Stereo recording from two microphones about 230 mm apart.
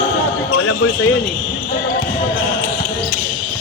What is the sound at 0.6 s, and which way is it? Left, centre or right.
Speech, left.